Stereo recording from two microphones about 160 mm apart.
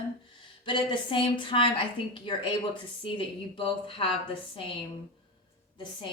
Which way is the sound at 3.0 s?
35° left (ahead or behind).